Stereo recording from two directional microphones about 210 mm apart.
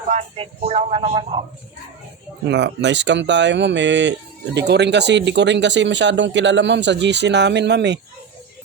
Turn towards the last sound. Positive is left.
turn(degrees=-55)  # may be behind; listen again after turning